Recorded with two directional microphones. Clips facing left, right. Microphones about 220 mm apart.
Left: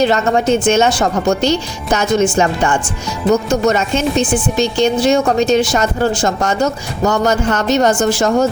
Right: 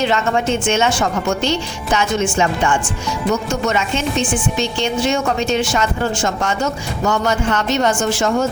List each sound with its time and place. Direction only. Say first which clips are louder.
0.0 s speech: left 4 dB; 40° left (ahead or behind)